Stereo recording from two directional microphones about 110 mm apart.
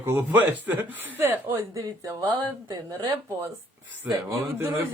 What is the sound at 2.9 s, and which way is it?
Speech, 35° right (ahead or behind).